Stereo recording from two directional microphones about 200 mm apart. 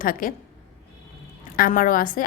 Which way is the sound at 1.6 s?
40° left (ahead or behind).